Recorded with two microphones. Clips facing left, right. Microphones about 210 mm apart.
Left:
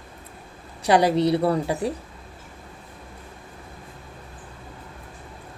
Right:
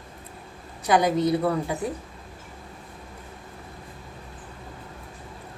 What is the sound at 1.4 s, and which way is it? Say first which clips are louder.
Speech: left 3 dB; 35° left (ahead or behind).